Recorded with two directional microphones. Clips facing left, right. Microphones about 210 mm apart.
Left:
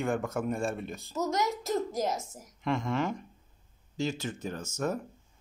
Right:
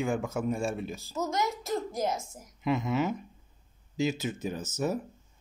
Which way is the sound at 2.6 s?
5° right (ahead or behind).